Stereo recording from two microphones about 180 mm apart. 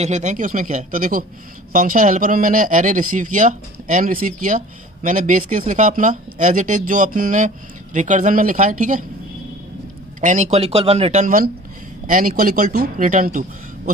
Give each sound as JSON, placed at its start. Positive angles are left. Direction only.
{"t": 0.0, "sound": "speech", "side_deg": -40}
{"t": 10.2, "sound": "speech", "side_deg": -40}